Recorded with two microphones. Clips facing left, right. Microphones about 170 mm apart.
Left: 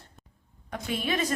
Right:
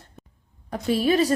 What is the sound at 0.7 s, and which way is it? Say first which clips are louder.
Speech: right 9 dB; 35° right (ahead or behind).